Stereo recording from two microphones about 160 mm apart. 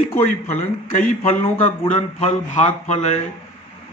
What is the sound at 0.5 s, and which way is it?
Speech, 50° left (ahead or behind).